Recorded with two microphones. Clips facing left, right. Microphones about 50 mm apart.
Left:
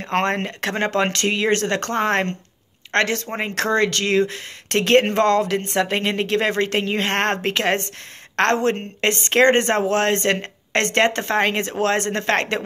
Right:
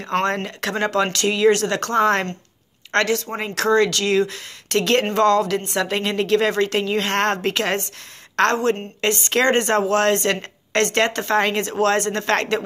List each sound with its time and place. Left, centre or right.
0.1 s speech: left